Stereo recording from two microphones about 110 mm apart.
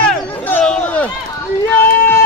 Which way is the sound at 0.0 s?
15° left (ahead or behind).